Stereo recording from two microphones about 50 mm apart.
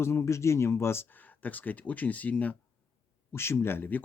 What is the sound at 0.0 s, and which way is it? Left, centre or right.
Speech, left.